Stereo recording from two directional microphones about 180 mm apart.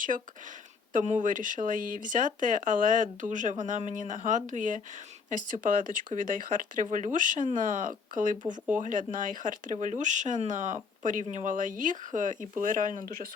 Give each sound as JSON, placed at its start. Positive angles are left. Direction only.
{"t": 0.9, "sound": "speech", "side_deg": -45}